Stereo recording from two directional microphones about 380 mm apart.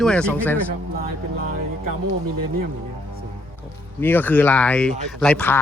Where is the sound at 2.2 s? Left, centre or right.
Right.